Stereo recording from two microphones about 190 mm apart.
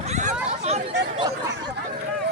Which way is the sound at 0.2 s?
40° right (ahead or behind).